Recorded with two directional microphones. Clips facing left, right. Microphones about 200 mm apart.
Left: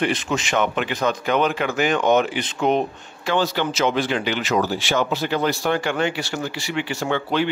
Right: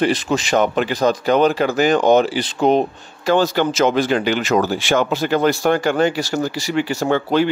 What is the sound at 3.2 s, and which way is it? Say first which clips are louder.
Speech: right 5 dB; 45° right (ahead or behind).